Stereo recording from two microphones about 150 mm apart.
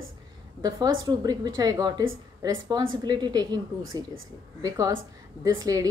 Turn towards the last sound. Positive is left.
turn(degrees=-20)  # may be behind; listen again after turning